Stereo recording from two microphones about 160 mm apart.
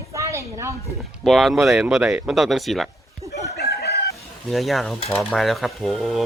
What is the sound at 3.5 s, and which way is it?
Chicken, 90° left.